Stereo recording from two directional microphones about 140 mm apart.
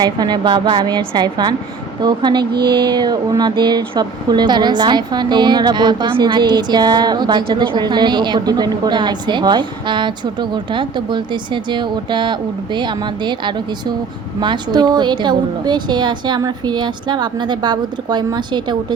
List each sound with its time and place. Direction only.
0.0 s speech: 30° right (ahead or behind)